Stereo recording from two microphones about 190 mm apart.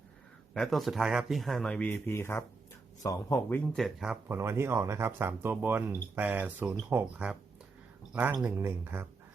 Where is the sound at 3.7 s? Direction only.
Centre (ahead or behind).